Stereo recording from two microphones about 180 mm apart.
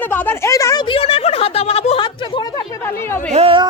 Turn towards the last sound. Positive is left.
turn(degrees=-30)  # may be behind; listen again after turning